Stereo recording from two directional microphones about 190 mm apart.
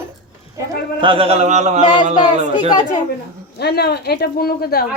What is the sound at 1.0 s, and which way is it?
Speech, 30° right (ahead or behind).